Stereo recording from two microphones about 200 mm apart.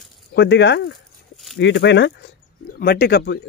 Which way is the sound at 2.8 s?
50° left (ahead or behind).